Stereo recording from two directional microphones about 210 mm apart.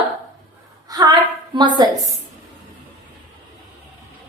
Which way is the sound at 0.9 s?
20° right (ahead or behind).